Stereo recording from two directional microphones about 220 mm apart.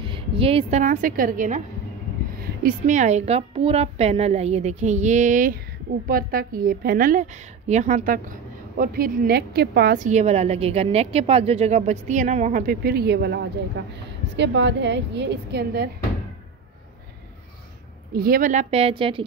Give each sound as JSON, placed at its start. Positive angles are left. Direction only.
{"t": 0.0, "sound": "a woman's voice", "side_deg": -25}
{"t": 2.6, "sound": "a woman's voice", "side_deg": -35}
{"t": 18.1, "sound": "a woman's voice", "side_deg": -40}